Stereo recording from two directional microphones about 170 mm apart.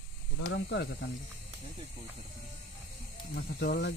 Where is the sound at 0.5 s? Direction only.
80° left.